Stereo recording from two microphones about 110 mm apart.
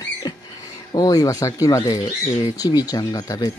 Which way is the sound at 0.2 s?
40° left (ahead or behind).